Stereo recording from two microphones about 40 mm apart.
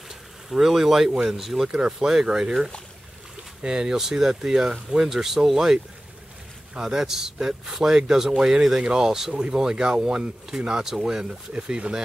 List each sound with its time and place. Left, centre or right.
0.1 s speech: centre
1.7 s speech: centre
3.6 s speech: centre